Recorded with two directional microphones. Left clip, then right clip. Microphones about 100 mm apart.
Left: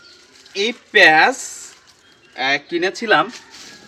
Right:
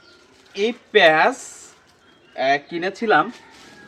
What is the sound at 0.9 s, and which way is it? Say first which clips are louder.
Speech: left 3 dB; 30° right (ahead or behind).